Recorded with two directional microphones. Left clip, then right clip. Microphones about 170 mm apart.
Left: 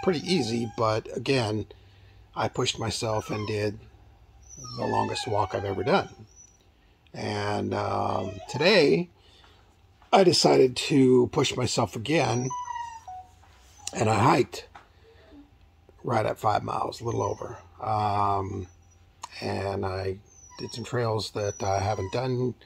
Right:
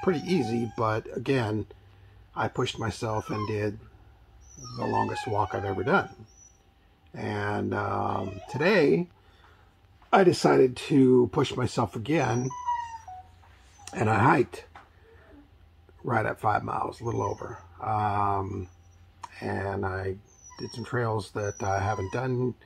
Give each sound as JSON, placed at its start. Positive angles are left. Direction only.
{"t": 0.1, "sound": "speech", "side_deg": 10}
{"t": 4.7, "sound": "speech", "side_deg": 10}
{"t": 5.0, "sound": "speech", "side_deg": -15}
{"t": 5.3, "sound": "speech", "side_deg": 10}
{"t": 7.1, "sound": "speech", "side_deg": 10}
{"t": 10.0, "sound": "speech", "side_deg": 10}
{"t": 13.8, "sound": "speech", "side_deg": 15}
{"t": 16.4, "sound": "speech", "side_deg": -20}
{"t": 16.8, "sound": "speech", "side_deg": 10}